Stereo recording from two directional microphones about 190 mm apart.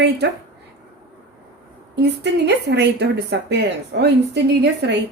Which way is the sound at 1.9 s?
60° right (ahead or behind).